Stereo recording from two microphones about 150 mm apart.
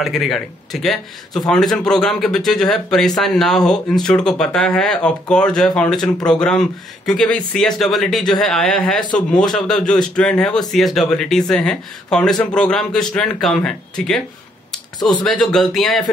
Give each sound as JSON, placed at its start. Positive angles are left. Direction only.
{"t": 0.0, "sound": "speech", "side_deg": 0}
{"t": 15.0, "sound": "speech", "side_deg": 30}
{"t": 15.2, "sound": "speech", "side_deg": 0}